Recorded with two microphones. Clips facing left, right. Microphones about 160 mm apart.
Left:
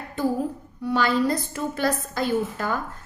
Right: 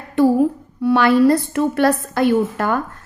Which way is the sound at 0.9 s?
65° right (ahead or behind).